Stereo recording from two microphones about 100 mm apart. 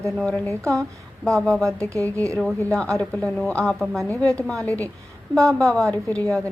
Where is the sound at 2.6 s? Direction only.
5° left (ahead or behind).